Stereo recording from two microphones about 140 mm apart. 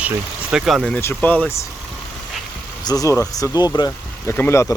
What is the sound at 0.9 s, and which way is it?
Speech, 15° left (ahead or behind).